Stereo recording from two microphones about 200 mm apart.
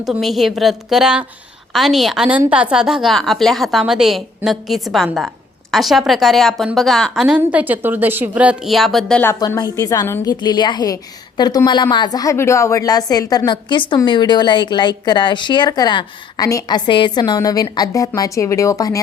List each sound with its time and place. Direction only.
0.0 s a woman's voice: centre (ahead or behind); by 19.0 s 15° left (ahead or behind)